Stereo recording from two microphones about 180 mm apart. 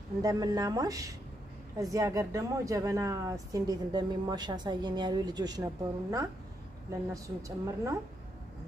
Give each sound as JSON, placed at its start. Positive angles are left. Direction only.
{"t": 0.2, "sound": "a woman's voice", "side_deg": -20}
{"t": 7.4, "sound": "a woman's voice", "side_deg": -15}